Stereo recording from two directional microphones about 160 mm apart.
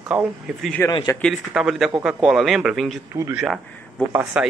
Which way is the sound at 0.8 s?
25° left (ahead or behind).